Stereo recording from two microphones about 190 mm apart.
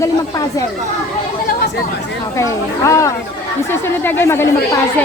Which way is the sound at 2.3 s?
15° left (ahead or behind).